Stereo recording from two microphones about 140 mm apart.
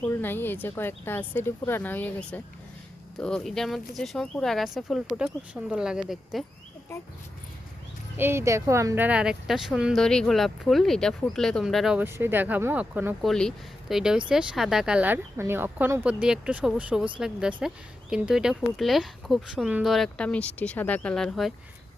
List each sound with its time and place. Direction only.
0.0 s speech: 15° left (ahead or behind); by 6.4 s 5° right (ahead or behind)
8.1 s speech: 15° right (ahead or behind)
9.0 s speech: 5° right (ahead or behind)
11.9 s speech: 15° right (ahead or behind)
13.2 s speech: 5° left (ahead or behind)